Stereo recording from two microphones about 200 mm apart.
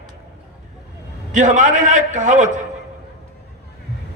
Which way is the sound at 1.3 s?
40° right (ahead or behind).